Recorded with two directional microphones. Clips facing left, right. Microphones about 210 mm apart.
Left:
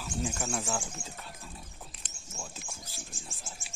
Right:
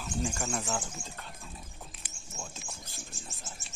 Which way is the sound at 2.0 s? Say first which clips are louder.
Right 1 dB; 10° right (ahead or behind).